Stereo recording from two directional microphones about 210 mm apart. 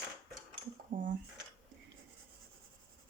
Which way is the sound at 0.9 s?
40° right (ahead or behind).